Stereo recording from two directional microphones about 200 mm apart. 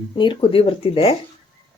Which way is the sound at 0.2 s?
25° left (ahead or behind).